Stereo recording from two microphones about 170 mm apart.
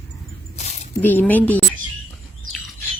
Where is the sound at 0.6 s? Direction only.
40° left (ahead or behind).